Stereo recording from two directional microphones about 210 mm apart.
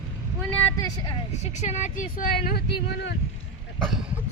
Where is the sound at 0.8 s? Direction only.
20° left (ahead or behind).